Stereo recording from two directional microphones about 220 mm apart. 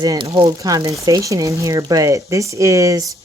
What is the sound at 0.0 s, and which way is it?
Speech, 15° right (ahead or behind).